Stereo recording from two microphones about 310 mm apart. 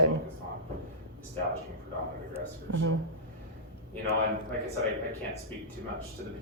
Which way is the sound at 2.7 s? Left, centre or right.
Right.